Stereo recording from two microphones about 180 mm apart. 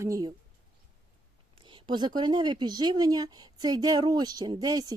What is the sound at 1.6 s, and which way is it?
Speech, 25° right (ahead or behind).